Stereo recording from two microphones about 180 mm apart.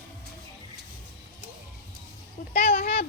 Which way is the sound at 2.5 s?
35° left (ahead or behind).